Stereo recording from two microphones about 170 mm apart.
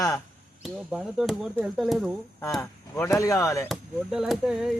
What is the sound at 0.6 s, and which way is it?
Speech, centre (ahead or behind).